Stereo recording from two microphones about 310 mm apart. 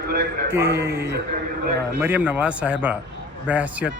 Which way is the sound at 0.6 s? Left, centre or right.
Right.